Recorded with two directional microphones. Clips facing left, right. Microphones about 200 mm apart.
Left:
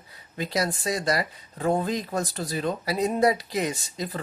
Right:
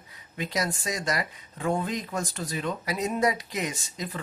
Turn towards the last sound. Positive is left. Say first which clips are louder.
# left 4 dB
turn(degrees=35)  # may be behind; listen again after turning